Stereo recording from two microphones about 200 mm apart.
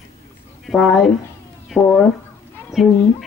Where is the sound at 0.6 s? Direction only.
Centre (ahead or behind).